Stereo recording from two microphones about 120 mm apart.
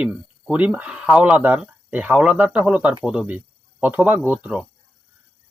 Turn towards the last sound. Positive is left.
turn(degrees=-10)  # may be behind; listen again after turning